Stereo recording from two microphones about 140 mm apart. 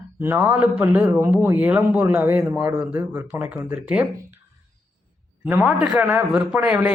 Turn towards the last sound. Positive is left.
turn(degrees=-10)  # may be behind; listen again after turning